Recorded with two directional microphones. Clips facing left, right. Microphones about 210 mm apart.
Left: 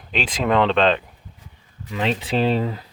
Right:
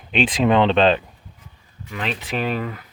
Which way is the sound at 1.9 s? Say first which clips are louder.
Left 4 dB; 25° left (ahead or behind).